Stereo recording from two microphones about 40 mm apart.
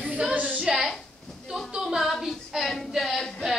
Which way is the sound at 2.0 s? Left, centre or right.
Centre.